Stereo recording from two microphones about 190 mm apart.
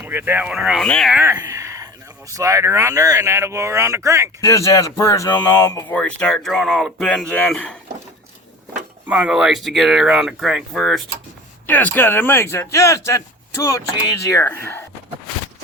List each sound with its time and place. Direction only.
0.0 s speech: 10° right (ahead or behind); by 1.1 s 5° left (ahead or behind)
1.1 s a sound: 10° right (ahead or behind)
2.3 s speech: 15° right (ahead or behind)
4.4 s speech: 15° left (ahead or behind)
9.0 s speech: 5° right (ahead or behind); by 14.8 s 10° left (ahead or behind)